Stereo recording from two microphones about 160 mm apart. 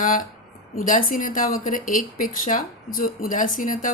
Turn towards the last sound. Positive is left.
turn(degrees=55)  # may be behind; listen again after turning